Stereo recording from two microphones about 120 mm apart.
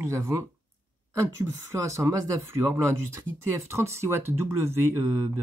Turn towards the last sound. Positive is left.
turn(degrees=-20)  # may be behind; listen again after turning